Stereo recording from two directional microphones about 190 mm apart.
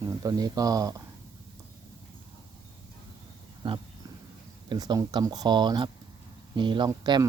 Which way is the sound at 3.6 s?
25° right (ahead or behind).